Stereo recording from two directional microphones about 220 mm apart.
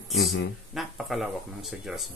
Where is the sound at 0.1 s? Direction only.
Centre (ahead or behind).